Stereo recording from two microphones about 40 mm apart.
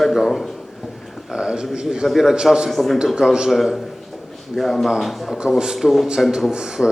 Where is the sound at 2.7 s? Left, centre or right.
Centre.